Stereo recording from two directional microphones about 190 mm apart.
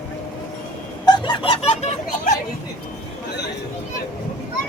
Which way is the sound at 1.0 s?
20° left (ahead or behind).